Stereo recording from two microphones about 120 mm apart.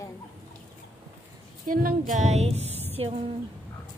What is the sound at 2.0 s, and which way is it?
Speech, 80° right.